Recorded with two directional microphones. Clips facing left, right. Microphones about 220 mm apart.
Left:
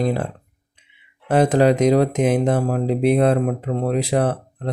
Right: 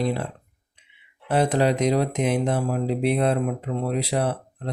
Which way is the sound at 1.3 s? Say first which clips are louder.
Left 5 dB; 50° left (ahead or behind).